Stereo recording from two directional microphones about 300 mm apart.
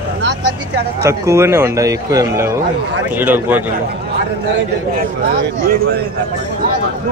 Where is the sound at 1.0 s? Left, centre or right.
Centre.